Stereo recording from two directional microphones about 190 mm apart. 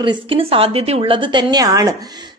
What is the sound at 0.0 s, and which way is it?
Speech, 25° right (ahead or behind).